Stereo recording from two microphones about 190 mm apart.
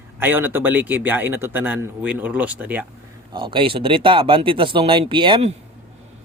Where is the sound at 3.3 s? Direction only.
25° right (ahead or behind).